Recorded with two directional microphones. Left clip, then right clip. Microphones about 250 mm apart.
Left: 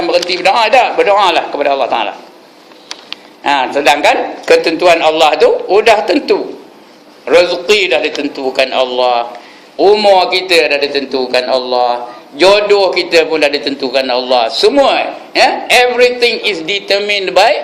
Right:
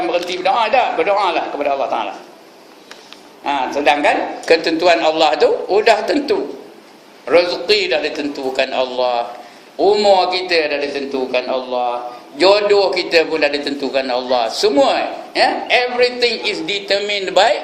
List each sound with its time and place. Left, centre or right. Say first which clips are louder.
0.1 s a man's voice: left 9 dB; left
7.5 s a man's voice: left 5 dB; left